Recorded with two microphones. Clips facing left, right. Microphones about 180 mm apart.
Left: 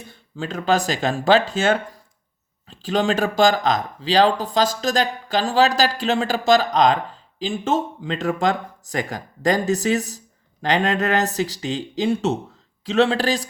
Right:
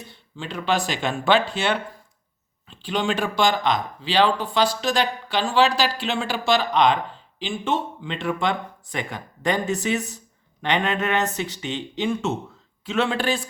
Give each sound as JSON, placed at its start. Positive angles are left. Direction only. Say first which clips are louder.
{"t": 0.1, "sound": "speech", "louder": "left 6 dB", "side_deg": 45}